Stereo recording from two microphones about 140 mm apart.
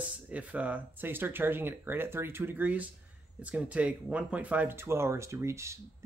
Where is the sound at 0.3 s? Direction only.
10° right (ahead or behind).